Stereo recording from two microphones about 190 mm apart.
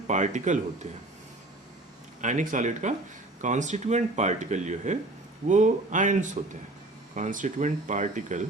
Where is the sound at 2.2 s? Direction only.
40° right (ahead or behind).